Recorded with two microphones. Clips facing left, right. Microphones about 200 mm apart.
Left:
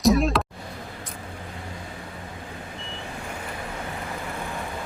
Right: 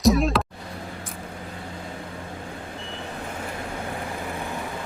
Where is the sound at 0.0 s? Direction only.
Centre (ahead or behind).